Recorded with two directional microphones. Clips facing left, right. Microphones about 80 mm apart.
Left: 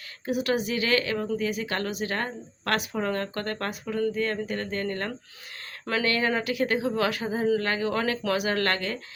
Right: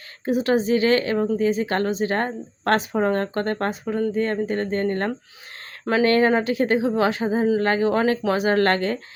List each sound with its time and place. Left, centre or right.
0.3 s a woman's voice: right